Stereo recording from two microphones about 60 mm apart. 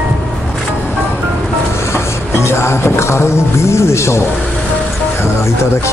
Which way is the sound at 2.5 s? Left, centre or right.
Left.